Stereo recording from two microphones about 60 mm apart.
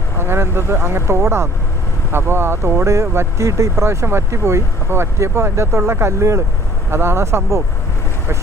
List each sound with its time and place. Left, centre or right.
0.2 s speech: right